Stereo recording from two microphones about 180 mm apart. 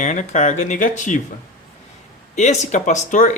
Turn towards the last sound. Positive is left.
turn(degrees=45)  # may be behind; listen again after turning